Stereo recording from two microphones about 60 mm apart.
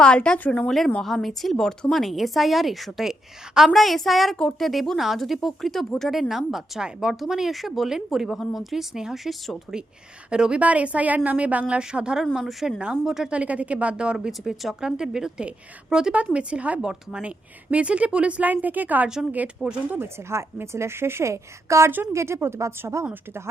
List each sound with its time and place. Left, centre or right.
0.0 s speech: centre
0.3 s speech: left
1.0 s speech: centre
3.7 s speech: centre
10.2 s a woman's voice: centre
12.2 s speech: centre
12.8 s a woman's voice: centre
13.3 s a woman's voice: right
14.3 s a woman's voice: centre; by 19.0 s right
19.6 s a woman's voice: centre
20.0 s a woman's voice: right